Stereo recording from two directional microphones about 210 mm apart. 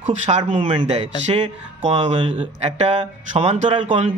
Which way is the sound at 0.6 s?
25° right (ahead or behind).